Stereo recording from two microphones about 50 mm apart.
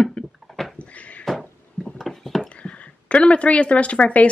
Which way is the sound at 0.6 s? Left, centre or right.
Centre.